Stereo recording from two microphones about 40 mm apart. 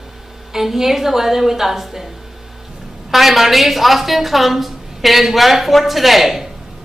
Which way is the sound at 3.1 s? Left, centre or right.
Centre.